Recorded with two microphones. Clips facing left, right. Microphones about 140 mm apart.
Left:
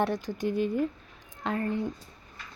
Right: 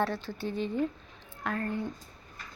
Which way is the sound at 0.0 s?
15° left (ahead or behind).